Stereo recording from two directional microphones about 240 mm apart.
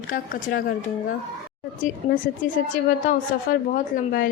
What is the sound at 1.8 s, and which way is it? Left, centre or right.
Speech, left.